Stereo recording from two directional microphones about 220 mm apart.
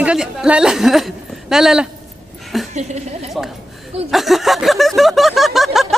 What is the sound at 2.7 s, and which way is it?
Speech, 30° right (ahead or behind).